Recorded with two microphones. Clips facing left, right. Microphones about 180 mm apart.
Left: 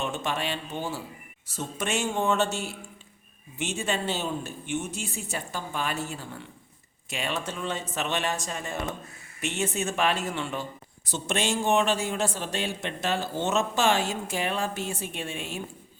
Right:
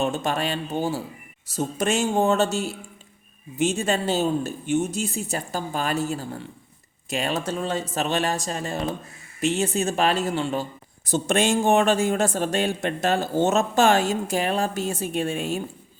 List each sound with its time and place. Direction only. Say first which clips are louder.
0.0 s speech: right 6 dB; 40° right (ahead or behind)